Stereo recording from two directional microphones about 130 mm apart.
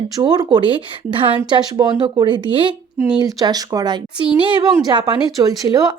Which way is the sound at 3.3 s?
30° right (ahead or behind).